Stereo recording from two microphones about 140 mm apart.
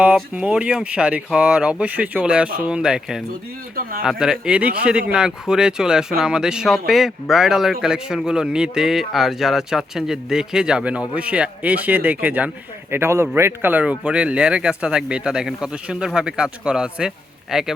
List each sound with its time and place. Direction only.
0.0 s a man's voice: 10° right (ahead or behind)